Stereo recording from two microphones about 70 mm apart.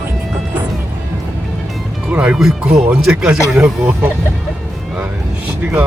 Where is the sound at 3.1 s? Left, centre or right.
Right.